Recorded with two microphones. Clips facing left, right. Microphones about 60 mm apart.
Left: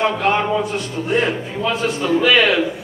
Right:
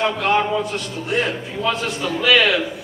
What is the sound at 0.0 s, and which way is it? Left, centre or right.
A man's voice, centre.